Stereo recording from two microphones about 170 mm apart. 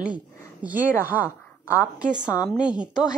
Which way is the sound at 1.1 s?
10° left (ahead or behind).